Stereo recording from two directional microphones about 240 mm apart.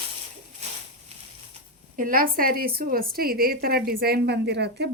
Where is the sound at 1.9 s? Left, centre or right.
Right.